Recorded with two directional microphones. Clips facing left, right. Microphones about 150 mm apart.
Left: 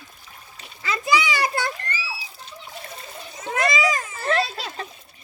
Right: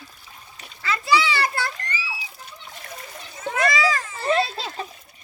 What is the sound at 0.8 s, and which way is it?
Children playing, 15° left (ahead or behind).